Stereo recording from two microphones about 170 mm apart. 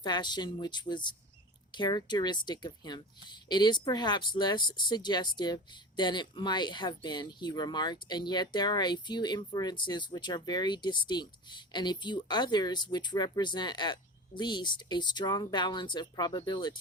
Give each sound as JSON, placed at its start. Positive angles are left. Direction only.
{"t": 0.0, "sound": "a woman's voice", "side_deg": 25}